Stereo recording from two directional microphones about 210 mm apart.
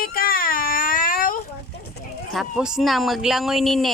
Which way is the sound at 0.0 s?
45° left (ahead or behind).